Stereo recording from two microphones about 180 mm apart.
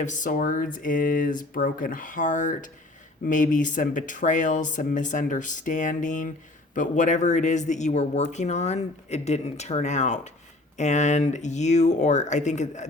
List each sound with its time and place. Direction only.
0.0 s speech: 45° left (ahead or behind)